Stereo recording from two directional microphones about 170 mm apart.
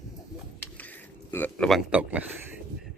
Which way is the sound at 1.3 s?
5° left (ahead or behind).